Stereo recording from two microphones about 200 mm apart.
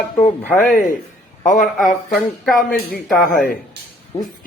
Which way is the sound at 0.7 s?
40° left (ahead or behind).